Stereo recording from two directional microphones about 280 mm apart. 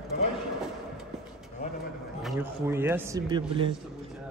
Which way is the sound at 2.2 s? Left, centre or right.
Centre.